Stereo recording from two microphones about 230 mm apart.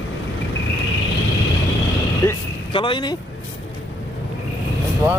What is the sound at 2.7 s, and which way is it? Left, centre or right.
Speech, left.